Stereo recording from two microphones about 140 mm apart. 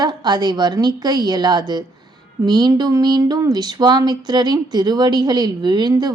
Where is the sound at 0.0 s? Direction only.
30° right (ahead or behind).